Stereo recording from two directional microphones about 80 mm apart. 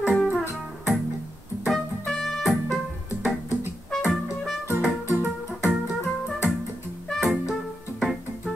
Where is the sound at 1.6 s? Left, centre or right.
Centre.